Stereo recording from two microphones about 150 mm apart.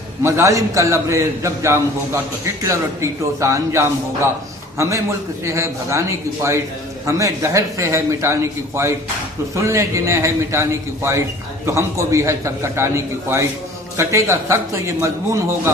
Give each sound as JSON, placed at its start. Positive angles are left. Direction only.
{"t": 0.2, "sound": "a man's voice", "side_deg": -20}